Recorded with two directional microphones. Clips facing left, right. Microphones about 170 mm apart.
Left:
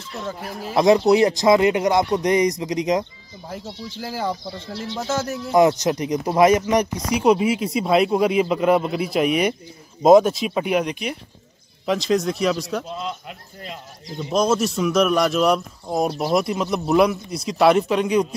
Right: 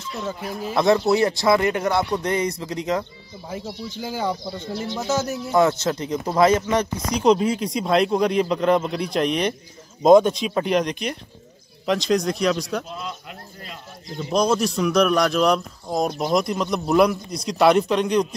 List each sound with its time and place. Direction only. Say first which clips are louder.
0.7 s speech: left 3 dB; 15° left (ahead or behind)
3.4 s speech: right 1 dB; centre (ahead or behind)
5.5 s speech: left 3 dB; 15° left (ahead or behind)
14.1 s speech: left 1 dB; 5° left (ahead or behind)